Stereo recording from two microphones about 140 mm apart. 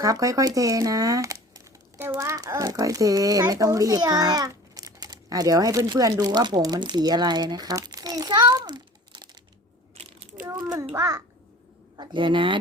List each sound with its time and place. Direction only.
0.0 s speech: 25° right (ahead or behind)
9.9 s crushing: 45° right (ahead or behind)
10.9 s a child's voice: 25° right (ahead or behind)